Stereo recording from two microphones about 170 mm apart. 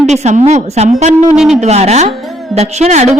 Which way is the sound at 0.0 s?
40° right (ahead or behind).